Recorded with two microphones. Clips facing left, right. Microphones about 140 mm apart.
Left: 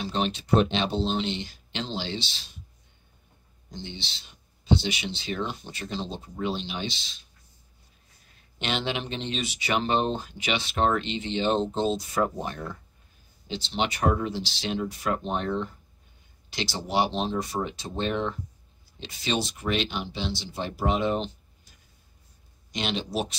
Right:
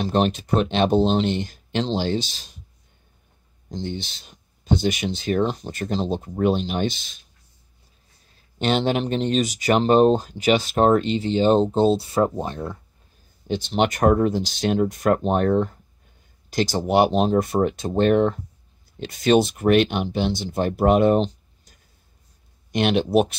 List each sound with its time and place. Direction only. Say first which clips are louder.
0.0 s speech: right 8 dB; 45° right (ahead or behind)
3.7 s speech: right 9 dB; 45° right (ahead or behind)
8.4 s speech: right 9 dB; 40° right (ahead or behind); by 12.7 s 25° right (ahead or behind)
13.5 s speech: right 8 dB; 50° right (ahead or behind)